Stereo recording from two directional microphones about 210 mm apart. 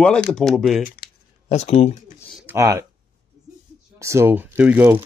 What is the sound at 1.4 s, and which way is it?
Speech, 30° left (ahead or behind).